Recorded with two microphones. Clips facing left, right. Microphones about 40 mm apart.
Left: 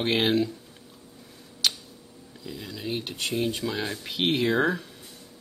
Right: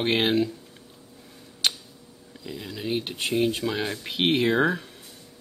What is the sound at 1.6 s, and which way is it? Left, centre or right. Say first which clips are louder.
Tick-tock: right 1 dB; centre.